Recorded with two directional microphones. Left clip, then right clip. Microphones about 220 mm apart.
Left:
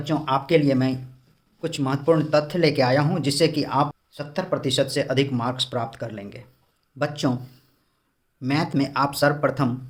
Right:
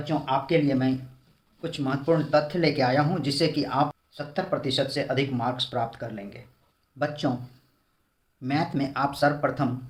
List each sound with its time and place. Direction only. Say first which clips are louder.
0.0 s speech: left 3 dB; 55° left (ahead or behind)